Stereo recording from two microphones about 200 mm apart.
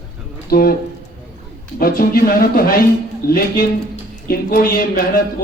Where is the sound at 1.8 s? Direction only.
45° left (ahead or behind).